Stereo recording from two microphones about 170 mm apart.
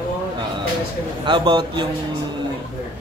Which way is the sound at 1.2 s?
25° right (ahead or behind).